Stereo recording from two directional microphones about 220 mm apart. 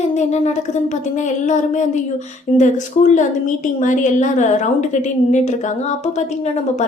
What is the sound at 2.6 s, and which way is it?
A woman's voice, 35° left (ahead or behind).